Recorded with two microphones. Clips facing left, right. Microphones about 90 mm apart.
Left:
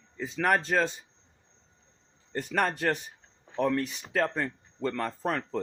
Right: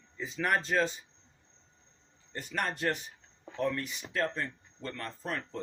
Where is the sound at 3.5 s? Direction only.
65° left (ahead or behind); by 5.6 s 90° left.